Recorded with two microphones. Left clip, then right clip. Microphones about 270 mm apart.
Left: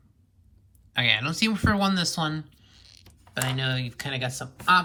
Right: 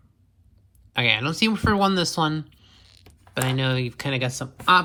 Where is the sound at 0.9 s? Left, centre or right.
Centre.